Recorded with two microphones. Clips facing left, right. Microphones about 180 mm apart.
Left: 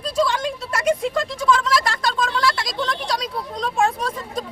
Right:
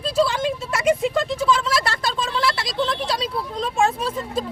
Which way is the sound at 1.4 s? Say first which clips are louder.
Left 5 dB; 30° right (ahead or behind).